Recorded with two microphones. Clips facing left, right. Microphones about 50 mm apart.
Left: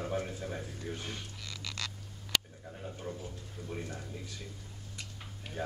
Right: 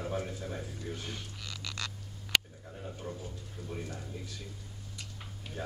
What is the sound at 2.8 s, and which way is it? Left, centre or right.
Speech, centre.